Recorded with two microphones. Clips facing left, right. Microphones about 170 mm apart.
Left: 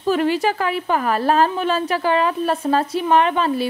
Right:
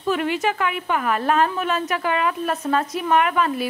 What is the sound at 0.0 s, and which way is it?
A woman's voice, 35° left (ahead or behind).